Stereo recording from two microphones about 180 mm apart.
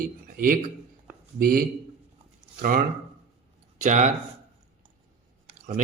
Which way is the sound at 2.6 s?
50° right (ahead or behind).